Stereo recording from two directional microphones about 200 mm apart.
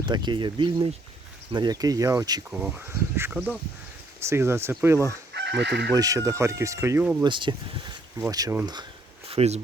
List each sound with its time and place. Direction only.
0.0 s speech: 20° right (ahead or behind)
2.5 s speech: 5° right (ahead or behind)
5.3 s chicken: 60° right (ahead or behind)
5.9 s speech: 20° right (ahead or behind)
7.3 s speech: 25° right (ahead or behind)
9.3 s speech: 30° right (ahead or behind)